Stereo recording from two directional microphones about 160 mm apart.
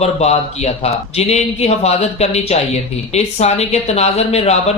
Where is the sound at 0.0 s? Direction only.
40° left (ahead or behind).